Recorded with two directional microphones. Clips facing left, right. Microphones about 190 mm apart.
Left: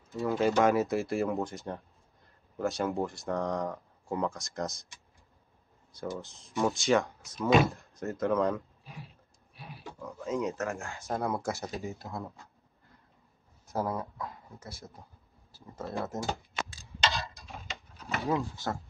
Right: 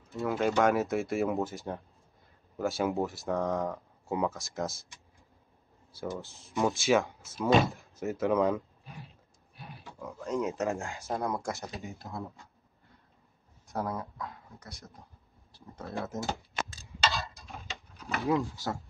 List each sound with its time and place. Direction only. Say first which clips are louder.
0.1 s speech: left 1 dB; centre (ahead or behind)
6.1 s speech: right 1 dB; centre (ahead or behind)
9.6 s pig: left 1 dB; centre (ahead or behind)
10.5 s speech: right 3 dB; 15° right (ahead or behind)
11.1 s speech: left 1 dB; centre (ahead or behind)
13.7 s speech: left 2 dB; centre (ahead or behind)
17.1 s a sound: even; centre (ahead or behind)